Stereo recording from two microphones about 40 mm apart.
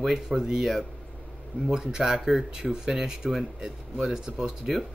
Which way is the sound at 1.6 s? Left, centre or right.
Centre.